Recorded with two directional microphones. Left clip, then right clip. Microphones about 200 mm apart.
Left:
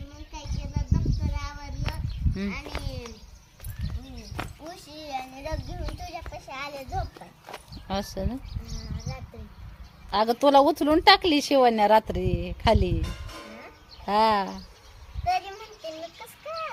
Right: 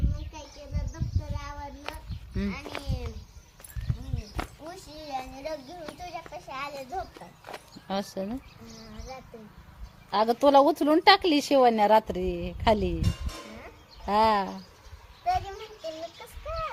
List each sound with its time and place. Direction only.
1.2 s child singing: 50° left (ahead or behind)
2.3 s speech: 10° left (ahead or behind)
4.4 s a child's voice: 5° right (ahead or behind)
7.4 s a sound: centre (ahead or behind)
10.1 s speech: 10° left (ahead or behind)
13.6 s sheep: 10° left (ahead or behind)
15.2 s a sound: centre (ahead or behind)